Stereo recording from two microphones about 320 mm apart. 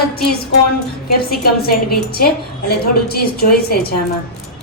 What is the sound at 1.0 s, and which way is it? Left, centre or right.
A woman's voice, left.